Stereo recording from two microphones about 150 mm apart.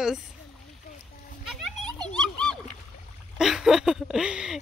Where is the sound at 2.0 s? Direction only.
5° left (ahead or behind).